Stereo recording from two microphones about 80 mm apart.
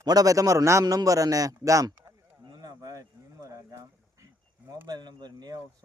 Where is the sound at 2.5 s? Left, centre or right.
Right.